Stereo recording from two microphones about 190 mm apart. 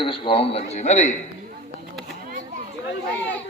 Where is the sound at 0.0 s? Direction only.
30° left (ahead or behind).